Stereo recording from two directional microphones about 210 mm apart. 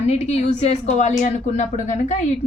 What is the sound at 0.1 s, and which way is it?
A woman's voice, 30° left (ahead or behind).